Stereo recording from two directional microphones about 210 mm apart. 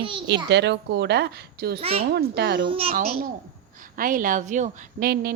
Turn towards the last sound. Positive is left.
turn(degrees=-45)  # may be behind; listen again after turning